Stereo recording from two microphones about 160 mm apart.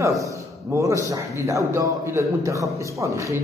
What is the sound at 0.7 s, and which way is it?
A man's voice, 20° right (ahead or behind).